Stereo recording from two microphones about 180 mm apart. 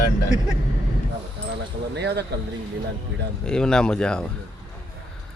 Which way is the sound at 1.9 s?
70° right (ahead or behind).